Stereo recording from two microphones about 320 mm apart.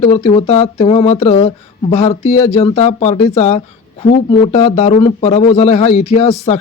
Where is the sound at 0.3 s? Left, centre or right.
Left.